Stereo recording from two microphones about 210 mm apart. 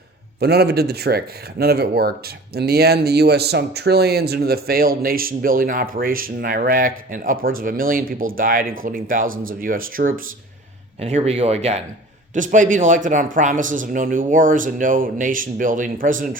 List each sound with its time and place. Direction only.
0.3 s speech: 50° right (ahead or behind)
11.0 s speech: 30° right (ahead or behind)